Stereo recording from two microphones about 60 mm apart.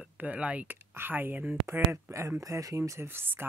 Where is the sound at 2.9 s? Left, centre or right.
Right.